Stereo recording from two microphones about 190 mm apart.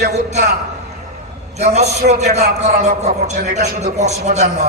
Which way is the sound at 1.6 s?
35° right (ahead or behind).